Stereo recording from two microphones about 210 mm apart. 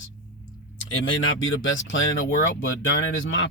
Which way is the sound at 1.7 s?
65° left (ahead or behind).